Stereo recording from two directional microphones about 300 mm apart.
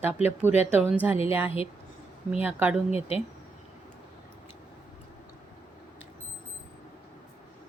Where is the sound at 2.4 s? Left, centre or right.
Centre.